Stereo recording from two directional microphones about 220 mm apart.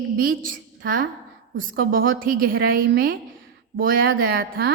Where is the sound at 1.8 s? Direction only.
40° right (ahead or behind).